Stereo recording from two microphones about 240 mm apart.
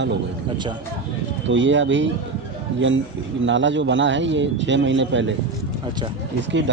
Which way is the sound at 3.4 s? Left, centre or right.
Right.